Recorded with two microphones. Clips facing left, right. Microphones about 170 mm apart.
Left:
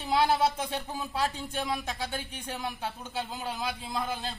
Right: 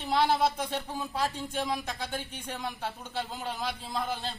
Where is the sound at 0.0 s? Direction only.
5° left (ahead or behind).